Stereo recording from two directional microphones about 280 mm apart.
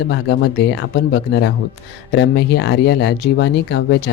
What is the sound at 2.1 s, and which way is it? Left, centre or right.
Speech, left.